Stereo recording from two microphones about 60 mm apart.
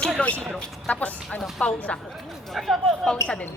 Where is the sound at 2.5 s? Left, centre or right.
Centre.